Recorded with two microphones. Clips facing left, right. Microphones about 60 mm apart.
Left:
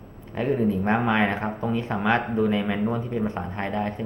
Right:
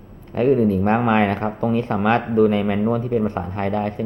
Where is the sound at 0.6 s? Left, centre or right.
Right.